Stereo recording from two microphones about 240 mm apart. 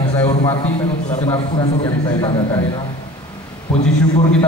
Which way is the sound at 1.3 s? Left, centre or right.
Centre.